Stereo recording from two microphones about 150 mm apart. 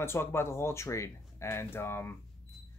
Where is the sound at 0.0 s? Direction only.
15° left (ahead or behind).